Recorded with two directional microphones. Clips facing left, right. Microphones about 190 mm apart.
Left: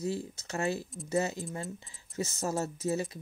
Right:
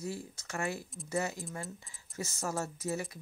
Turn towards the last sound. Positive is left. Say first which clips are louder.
# left 5 dB
turn(degrees=25)  # may be behind; listen again after turning